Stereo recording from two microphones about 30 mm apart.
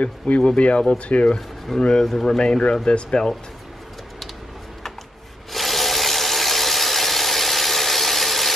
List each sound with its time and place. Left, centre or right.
0.3 s speech: left
0.6 s speech: left
1.7 s speech: centre
2.3 s speech: left
5.5 s engine: centre